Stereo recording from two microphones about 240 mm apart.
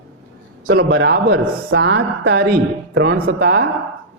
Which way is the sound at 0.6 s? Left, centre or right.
Right.